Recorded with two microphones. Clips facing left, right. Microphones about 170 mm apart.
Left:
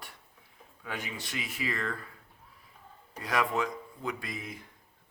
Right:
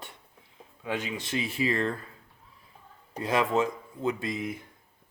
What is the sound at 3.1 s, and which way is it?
A man's voice, 25° right (ahead or behind).